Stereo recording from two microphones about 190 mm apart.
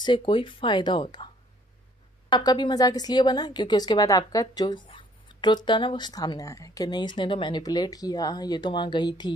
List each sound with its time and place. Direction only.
0.0 s speech: 25° left (ahead or behind)